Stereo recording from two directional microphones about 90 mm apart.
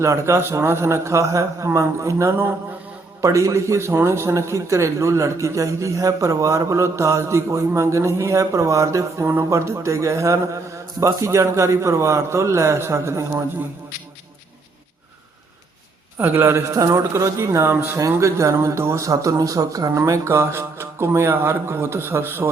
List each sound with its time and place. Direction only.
0.0 s a man's voice: 30° right (ahead or behind)
16.1 s a man's voice: 25° right (ahead or behind)